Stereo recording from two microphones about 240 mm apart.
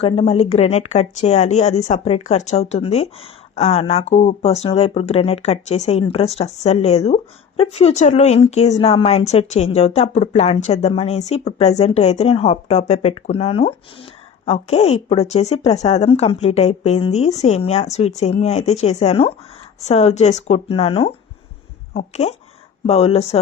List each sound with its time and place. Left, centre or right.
0.0 s speech: left